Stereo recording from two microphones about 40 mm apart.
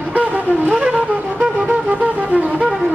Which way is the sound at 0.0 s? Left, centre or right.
Right.